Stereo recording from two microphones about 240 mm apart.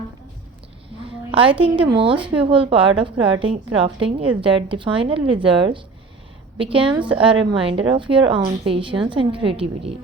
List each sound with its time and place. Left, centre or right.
1.3 s a woman's voice: right
6.9 s a woman's voice: centre
7.2 s a woman's voice: right